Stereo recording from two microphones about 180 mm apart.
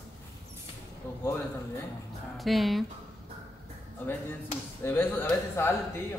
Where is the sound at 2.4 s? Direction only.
Centre (ahead or behind).